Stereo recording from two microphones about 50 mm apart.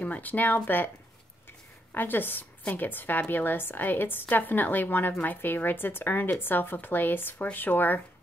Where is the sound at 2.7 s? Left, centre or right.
Left.